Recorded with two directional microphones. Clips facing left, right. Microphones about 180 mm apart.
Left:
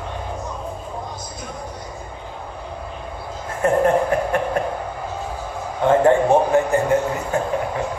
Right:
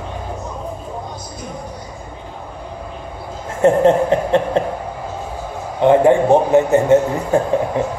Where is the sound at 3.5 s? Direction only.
25° right (ahead or behind).